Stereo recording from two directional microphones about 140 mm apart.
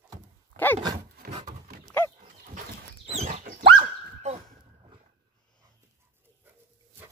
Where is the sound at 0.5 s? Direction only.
15° left (ahead or behind).